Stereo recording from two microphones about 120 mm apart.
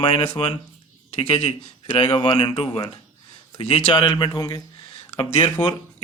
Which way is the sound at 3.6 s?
55° left (ahead or behind).